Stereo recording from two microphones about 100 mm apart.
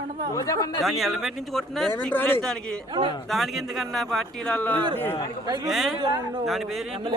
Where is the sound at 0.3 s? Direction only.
35° left (ahead or behind).